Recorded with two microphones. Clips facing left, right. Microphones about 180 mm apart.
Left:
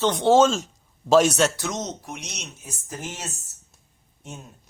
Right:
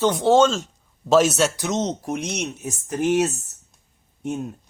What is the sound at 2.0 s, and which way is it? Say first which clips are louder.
Speech: right 11 dB; 50° right (ahead or behind).